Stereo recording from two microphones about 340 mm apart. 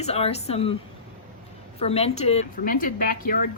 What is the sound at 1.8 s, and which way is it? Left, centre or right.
Speech, centre.